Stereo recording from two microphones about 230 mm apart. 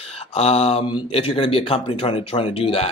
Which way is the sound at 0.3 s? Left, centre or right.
Left.